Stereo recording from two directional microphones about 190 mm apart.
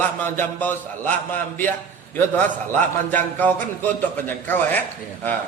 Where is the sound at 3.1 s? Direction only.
10° left (ahead or behind).